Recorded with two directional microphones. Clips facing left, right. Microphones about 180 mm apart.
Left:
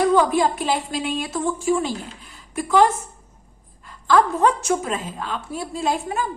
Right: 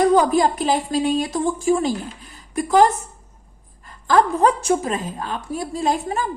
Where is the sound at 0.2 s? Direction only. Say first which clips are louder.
Right 2 dB; 40° right (ahead or behind).